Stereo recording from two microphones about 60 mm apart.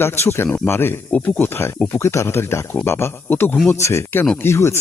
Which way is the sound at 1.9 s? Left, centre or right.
Left.